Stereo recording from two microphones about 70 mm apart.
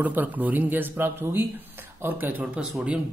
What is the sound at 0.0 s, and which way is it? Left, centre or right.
Speech, right.